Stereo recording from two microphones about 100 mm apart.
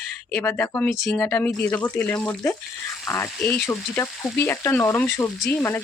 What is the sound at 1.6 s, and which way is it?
Speech, 15° left (ahead or behind).